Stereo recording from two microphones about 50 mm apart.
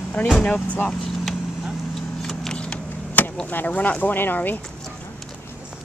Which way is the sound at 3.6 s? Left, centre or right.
Left.